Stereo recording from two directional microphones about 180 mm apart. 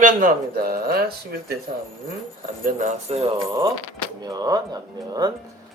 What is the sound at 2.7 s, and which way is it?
Speech, 50° right (ahead or behind).